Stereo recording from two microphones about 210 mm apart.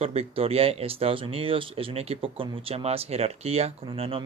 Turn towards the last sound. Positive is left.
turn(degrees=-25)  # may be behind; listen again after turning